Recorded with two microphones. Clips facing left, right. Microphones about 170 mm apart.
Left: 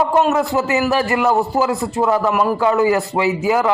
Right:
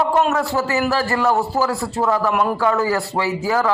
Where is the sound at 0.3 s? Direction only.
20° left (ahead or behind).